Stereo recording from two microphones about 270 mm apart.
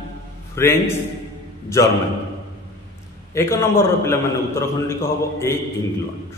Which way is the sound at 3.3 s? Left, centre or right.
Centre.